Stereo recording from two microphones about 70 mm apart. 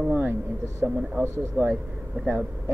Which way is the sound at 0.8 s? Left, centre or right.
Right.